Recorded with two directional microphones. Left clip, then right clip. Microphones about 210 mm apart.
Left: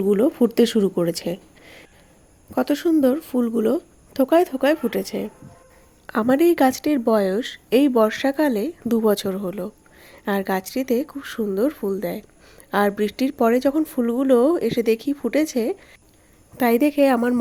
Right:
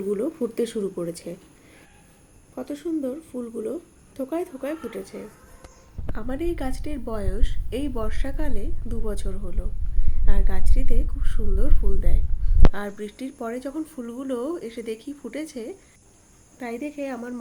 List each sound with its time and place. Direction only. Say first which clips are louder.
0.1 s a woman's voice: left 8 dB; 40° left (ahead or behind)
16.6 s a woman's voice: left 14 dB; 50° left (ahead or behind)